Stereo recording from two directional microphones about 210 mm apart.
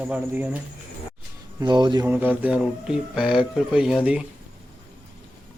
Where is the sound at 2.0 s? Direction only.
10° right (ahead or behind).